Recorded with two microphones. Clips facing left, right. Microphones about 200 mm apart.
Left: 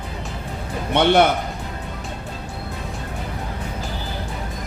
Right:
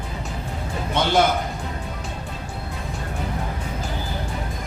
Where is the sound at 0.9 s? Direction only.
65° left (ahead or behind).